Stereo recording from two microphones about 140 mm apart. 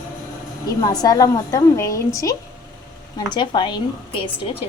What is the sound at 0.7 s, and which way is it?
A woman's voice, 25° left (ahead or behind).